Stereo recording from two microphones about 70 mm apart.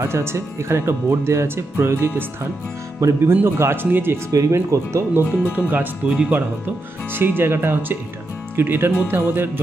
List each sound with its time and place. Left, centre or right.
0.0 s speech: right
3.0 s speech: right
3.8 s music: right
4.3 s speech: right
5.5 s music: right
6.1 s speech: centre
7.1 s speech: right
9.0 s music: right